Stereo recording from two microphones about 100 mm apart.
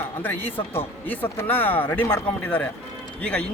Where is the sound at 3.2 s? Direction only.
15° left (ahead or behind).